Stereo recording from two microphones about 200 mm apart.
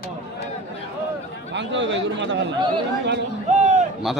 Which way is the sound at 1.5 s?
65° right (ahead or behind).